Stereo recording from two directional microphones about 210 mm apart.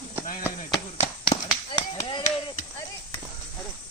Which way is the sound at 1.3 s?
35° left (ahead or behind).